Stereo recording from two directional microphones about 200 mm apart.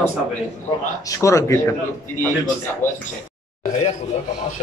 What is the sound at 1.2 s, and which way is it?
Speech, 15° left (ahead or behind).